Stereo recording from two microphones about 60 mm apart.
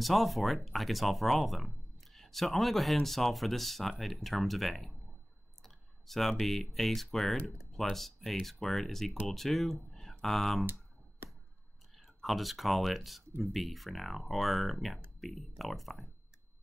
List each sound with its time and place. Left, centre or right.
0.0 s speech: centre
12.2 s speech: centre